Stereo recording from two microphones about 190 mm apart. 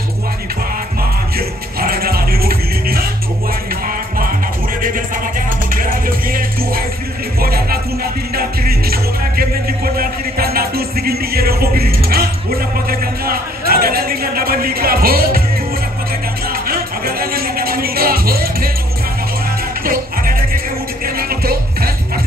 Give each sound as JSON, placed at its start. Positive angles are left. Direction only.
{"t": 1.8, "sound": "music", "side_deg": -50}
{"t": 5.8, "sound": "music", "side_deg": -50}
{"t": 13.0, "sound": "a sound", "side_deg": -50}
{"t": 16.4, "sound": "music", "side_deg": -50}
{"t": 19.8, "sound": "music", "side_deg": -50}